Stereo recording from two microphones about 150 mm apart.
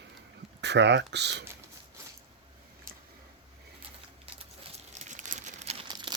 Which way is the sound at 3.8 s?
40° right (ahead or behind).